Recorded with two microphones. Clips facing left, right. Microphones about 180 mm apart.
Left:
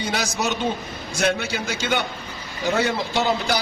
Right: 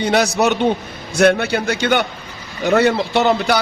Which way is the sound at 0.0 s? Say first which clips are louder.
Right 9 dB; 65° right (ahead or behind).